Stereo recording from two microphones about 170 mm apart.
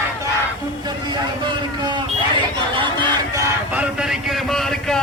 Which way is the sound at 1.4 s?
25° right (ahead or behind).